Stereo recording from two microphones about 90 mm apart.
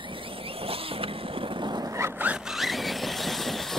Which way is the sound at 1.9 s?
35° right (ahead or behind).